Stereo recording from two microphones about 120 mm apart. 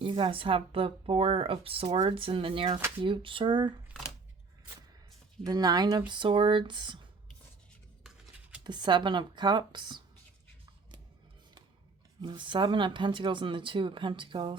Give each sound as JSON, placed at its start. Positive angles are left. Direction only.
{"t": 0.0, "sound": "speech", "side_deg": -45}
{"t": 5.4, "sound": "speech", "side_deg": -35}
{"t": 8.6, "sound": "speech", "side_deg": -40}
{"t": 12.2, "sound": "speech", "side_deg": -40}